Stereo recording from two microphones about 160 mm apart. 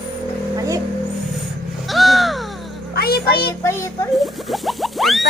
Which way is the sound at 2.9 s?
75° left (ahead or behind).